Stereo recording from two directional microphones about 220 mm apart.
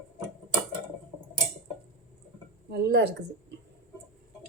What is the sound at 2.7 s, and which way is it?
Speech, 50° right (ahead or behind).